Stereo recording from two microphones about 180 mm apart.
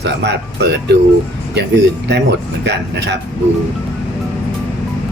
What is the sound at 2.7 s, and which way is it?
Speech, 70° right (ahead or behind).